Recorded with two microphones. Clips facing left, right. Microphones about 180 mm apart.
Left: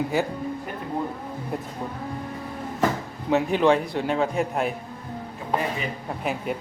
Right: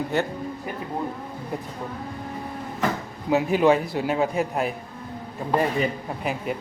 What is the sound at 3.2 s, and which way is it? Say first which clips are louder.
A man's voice: right 1 dB; 5° right (ahead or behind).